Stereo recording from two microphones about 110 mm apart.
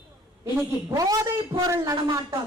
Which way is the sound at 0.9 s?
30° right (ahead or behind).